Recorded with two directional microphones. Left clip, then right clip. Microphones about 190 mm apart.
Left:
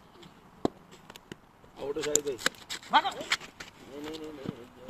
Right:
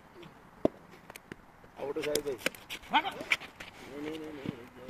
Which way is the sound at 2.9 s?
20° left (ahead or behind).